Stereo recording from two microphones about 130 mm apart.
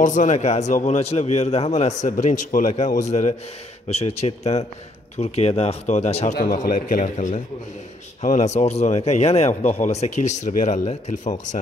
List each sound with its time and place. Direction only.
0.0 s a man's voice: 70° left (ahead or behind); by 6.3 s 55° left (ahead or behind)
6.5 s a man's voice: 90° left; by 11.5 s 65° left (ahead or behind)